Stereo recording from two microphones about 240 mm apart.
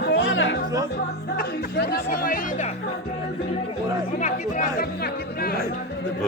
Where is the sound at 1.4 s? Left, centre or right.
Left.